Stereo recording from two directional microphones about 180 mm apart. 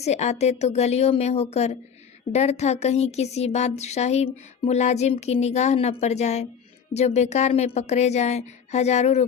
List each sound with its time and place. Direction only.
0.0 s speech: 35° left (ahead or behind)